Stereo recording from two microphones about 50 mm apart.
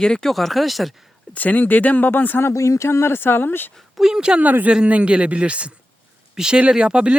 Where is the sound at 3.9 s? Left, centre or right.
Centre.